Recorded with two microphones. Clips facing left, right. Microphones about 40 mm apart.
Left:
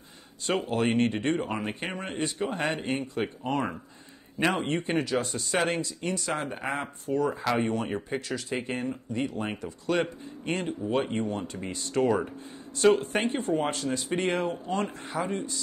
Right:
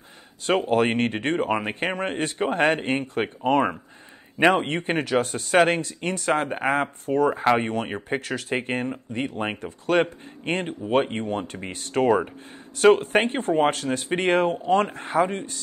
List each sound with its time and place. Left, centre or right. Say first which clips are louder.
0.5 s speech: right 6 dB; right